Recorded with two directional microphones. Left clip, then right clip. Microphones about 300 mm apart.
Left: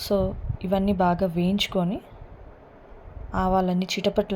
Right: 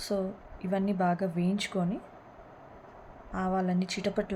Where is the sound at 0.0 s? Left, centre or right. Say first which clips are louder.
Left 8 dB; centre.